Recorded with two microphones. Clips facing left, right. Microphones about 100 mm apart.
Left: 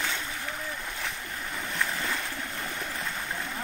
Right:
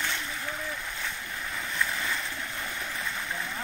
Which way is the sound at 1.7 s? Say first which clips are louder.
Even; 30° left (ahead or behind).